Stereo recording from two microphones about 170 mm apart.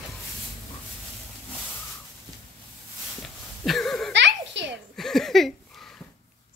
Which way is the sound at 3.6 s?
Centre (ahead or behind).